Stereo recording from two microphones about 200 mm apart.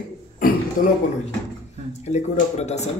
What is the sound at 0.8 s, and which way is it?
Speech, 45° left (ahead or behind).